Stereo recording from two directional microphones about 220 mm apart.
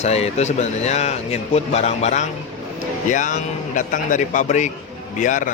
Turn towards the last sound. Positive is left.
turn(degrees=35)  # may be behind; listen again after turning